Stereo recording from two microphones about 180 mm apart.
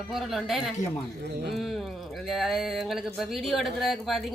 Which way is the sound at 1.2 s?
60° right (ahead or behind).